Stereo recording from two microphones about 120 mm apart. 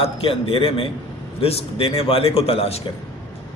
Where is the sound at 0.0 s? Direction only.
50° left (ahead or behind).